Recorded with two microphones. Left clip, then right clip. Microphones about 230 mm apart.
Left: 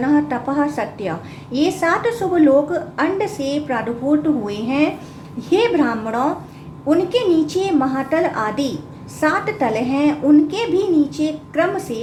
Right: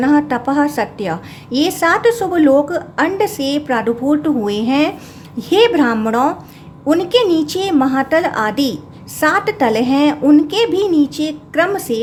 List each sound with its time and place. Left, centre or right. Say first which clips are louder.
0.0 s a woman's voice: right 4 dB; right